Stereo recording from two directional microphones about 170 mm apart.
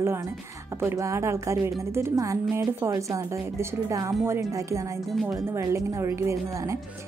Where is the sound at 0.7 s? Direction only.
15° right (ahead or behind).